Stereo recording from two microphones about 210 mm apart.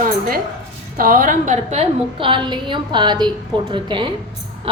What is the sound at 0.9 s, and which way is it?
A woman's voice, 40° right (ahead or behind).